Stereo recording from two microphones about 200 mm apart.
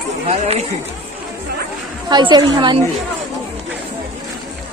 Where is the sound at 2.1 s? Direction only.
20° right (ahead or behind).